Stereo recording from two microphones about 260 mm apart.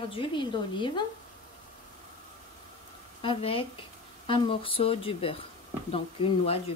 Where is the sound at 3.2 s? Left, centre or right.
Centre.